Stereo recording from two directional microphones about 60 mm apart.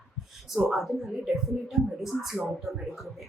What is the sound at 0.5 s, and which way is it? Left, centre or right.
A woman's voice, centre.